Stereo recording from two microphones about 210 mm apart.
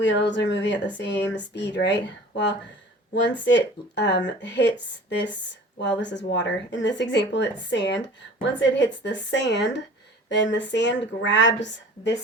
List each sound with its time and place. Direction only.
0.0 s speech: 55° left (ahead or behind)